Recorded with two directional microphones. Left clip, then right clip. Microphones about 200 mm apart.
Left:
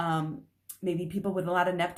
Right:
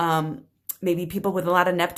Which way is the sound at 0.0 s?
40° right (ahead or behind).